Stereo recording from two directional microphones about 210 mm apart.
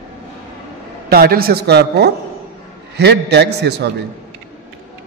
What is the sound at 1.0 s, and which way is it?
A man's voice, 45° right (ahead or behind).